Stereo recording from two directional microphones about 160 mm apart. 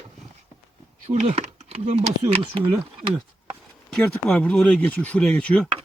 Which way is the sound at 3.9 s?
10° left (ahead or behind).